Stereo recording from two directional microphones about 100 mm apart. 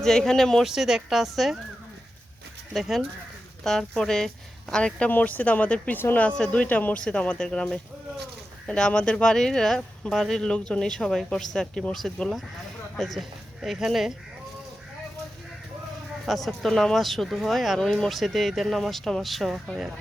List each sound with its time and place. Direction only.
0.0 s speech: 5° left (ahead or behind)
2.7 s speech: centre (ahead or behind)
16.2 s speech: centre (ahead or behind)